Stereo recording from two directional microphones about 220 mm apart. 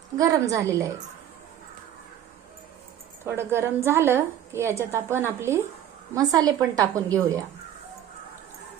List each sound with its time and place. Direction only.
0.2 s a woman's voice: 15° right (ahead or behind)
3.2 s a woman's voice: 10° right (ahead or behind)